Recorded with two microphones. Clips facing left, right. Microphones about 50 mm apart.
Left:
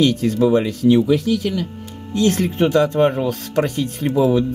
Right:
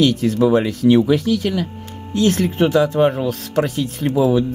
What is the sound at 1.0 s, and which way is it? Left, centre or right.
Speech, right.